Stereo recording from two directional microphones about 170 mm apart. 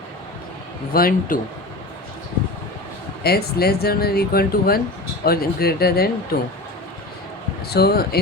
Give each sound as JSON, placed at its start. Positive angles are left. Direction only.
{"t": 0.9, "sound": "speech", "side_deg": 60}
{"t": 3.2, "sound": "speech", "side_deg": 65}
{"t": 7.7, "sound": "speech", "side_deg": 70}